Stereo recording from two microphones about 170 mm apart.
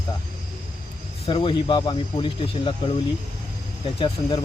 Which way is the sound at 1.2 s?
30° left (ahead or behind).